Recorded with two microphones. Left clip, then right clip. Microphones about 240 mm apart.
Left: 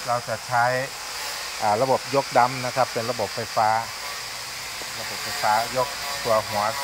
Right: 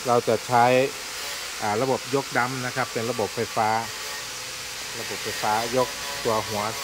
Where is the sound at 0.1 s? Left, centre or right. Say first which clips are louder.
Right 4 dB; right.